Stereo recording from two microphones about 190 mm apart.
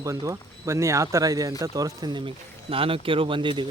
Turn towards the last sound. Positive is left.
turn(degrees=-25)  # may be behind; listen again after turning